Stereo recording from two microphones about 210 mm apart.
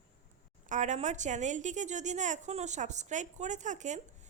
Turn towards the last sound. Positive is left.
turn(degrees=-35)  # may be behind; listen again after turning